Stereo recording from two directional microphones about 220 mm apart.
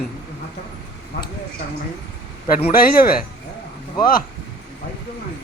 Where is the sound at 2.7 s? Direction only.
40° left (ahead or behind).